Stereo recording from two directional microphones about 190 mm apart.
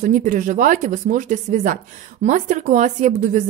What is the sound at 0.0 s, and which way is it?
A woman's voice, 45° right (ahead or behind).